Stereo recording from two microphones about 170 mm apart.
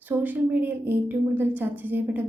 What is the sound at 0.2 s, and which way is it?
A woman's voice, 10° right (ahead or behind).